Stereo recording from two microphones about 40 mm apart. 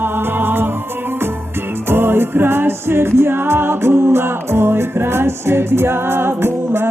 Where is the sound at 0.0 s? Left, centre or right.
Right.